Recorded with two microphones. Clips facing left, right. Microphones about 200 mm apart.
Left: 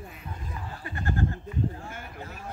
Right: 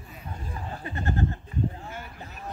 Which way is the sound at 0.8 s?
20° right (ahead or behind).